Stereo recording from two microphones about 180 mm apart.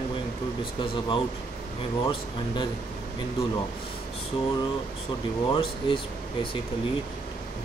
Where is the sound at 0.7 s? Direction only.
25° left (ahead or behind).